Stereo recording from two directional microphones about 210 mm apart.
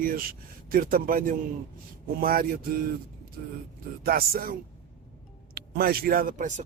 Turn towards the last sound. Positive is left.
turn(degrees=-35)  # may be behind; listen again after turning